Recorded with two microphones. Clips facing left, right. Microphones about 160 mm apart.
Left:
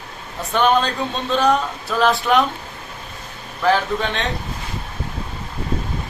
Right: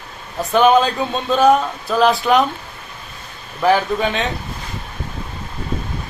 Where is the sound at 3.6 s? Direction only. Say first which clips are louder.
Right 3 dB; 5° right (ahead or behind).